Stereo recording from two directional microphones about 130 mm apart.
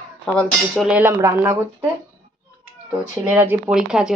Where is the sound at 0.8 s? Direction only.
15° right (ahead or behind).